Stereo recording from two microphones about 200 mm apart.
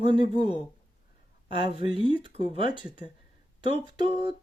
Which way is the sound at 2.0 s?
25° right (ahead or behind).